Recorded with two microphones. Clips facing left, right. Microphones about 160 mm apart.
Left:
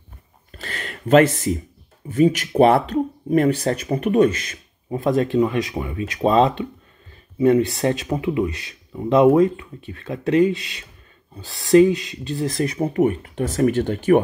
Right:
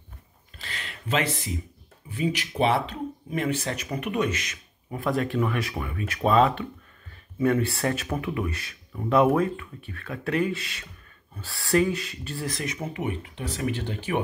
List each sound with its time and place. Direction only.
0.5 s a sound: 50° left (ahead or behind)
2.0 s speech: 45° left (ahead or behind); by 12.5 s 20° left (ahead or behind)
12.5 s speech: 35° left (ahead or behind)